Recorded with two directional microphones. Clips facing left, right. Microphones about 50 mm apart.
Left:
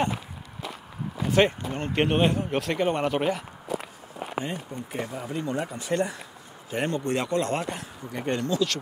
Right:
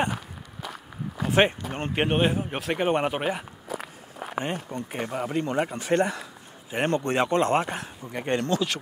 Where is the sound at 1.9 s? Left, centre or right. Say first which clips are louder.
Left 1 dB; centre.